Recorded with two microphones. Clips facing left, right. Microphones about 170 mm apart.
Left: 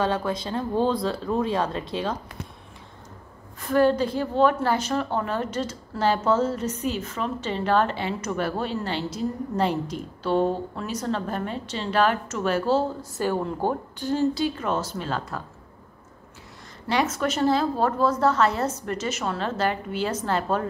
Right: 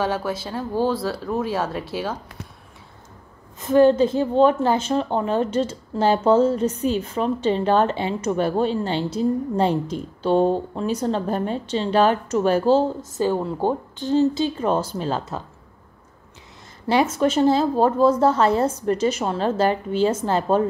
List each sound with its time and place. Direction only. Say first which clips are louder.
0.0 s speech: right 1 dB; 10° right (ahead or behind)
3.6 s a woman's voice: right 5 dB; 20° right (ahead or behind)
13.3 s a woman's voice: right 1 dB; 15° right (ahead or behind)
14.9 s a woman's voice: right 4 dB; 30° right (ahead or behind)
16.8 s a woman's voice: right 5 dB; 30° right (ahead or behind)